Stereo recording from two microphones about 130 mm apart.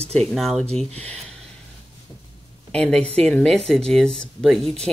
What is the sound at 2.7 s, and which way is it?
Speech, 10° left (ahead or behind).